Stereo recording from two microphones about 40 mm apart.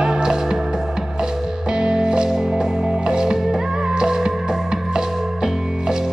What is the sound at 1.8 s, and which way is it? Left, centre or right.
Music, centre.